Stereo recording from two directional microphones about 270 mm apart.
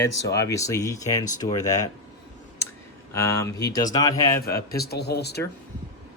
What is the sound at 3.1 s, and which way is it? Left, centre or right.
Speech, centre.